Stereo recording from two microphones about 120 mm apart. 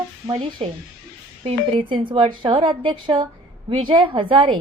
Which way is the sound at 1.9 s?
45° right (ahead or behind).